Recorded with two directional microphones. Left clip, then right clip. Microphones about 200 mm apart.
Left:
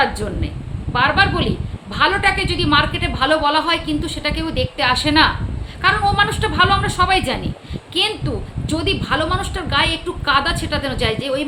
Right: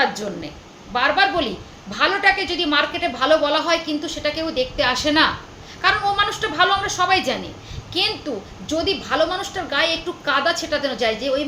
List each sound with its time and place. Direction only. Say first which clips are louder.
0.9 s a woman's voice: left 2 dB; 15° left (ahead or behind)